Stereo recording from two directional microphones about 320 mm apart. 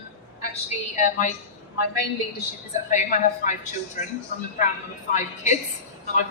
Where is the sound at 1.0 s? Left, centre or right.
Left.